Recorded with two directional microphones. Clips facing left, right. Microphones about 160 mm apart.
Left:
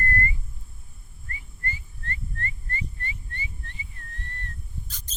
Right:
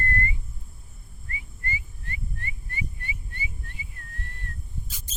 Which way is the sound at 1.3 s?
10° right (ahead or behind).